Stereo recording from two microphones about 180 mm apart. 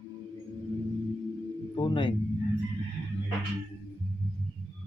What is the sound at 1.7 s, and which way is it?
Speech, 25° left (ahead or behind).